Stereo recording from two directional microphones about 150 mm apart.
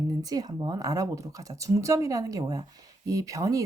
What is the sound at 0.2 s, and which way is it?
A woman's voice, 25° right (ahead or behind).